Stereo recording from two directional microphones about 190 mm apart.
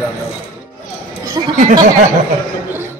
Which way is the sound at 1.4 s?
20° right (ahead or behind).